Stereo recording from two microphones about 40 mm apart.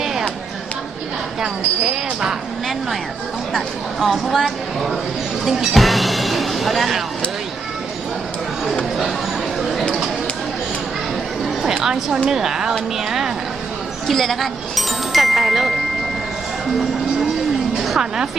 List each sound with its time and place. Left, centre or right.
0.0 s a sound: centre
1.4 s speech: centre
4.0 s a woman's voice: centre
11.6 s a woman's voice: centre
14.1 s speech: centre
17.8 s music: centre